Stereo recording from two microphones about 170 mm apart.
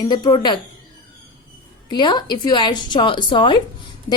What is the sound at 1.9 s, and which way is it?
A woman's voice, 25° left (ahead or behind).